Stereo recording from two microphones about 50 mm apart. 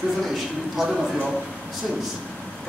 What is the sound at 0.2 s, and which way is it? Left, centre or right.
A man's voice, centre.